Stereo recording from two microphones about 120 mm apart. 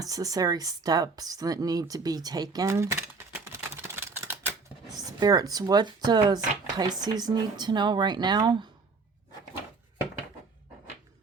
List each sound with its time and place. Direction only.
0.0 s speech: 30° right (ahead or behind)
3.4 s a sound: 20° right (ahead or behind)
5.2 s speech: 30° right (ahead or behind)